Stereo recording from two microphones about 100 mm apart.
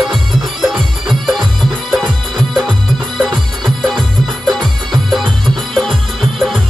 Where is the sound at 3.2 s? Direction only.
Centre (ahead or behind).